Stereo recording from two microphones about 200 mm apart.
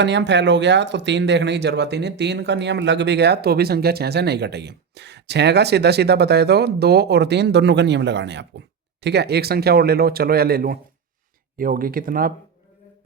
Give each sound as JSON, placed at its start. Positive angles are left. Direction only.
{"t": 0.0, "sound": "speech", "side_deg": -60}